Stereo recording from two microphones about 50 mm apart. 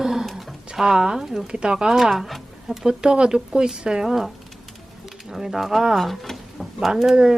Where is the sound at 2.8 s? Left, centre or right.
Centre.